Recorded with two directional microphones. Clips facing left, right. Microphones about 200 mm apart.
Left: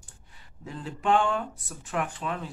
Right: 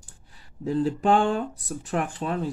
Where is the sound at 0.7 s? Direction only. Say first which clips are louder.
Right 6 dB; 35° right (ahead or behind).